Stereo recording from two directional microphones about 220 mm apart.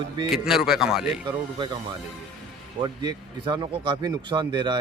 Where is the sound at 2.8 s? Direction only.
20° right (ahead or behind).